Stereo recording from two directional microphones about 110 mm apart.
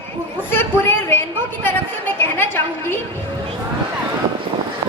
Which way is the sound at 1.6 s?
20° left (ahead or behind).